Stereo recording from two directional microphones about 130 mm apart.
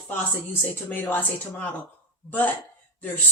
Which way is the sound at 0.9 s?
15° left (ahead or behind).